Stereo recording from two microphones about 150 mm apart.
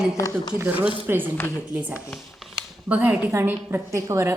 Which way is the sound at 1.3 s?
15° left (ahead or behind).